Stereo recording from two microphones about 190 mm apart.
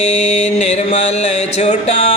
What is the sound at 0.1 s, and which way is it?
Mantra, 35° left (ahead or behind).